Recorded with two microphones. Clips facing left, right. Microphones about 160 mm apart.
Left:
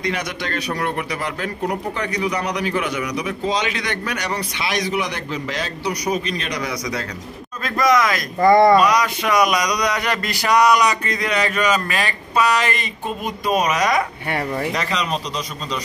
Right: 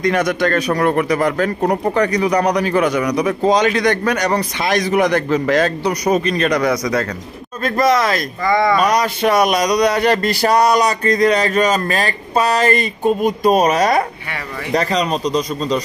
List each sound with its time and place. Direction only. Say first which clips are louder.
0.0 s a man's voice: right 9 dB; 50° right (ahead or behind)
7.6 s speech: right 3 dB; 30° right (ahead or behind)
8.4 s speech: left 5 dB; 35° left (ahead or behind)
9.0 s speech: right 4 dB; 30° right (ahead or behind)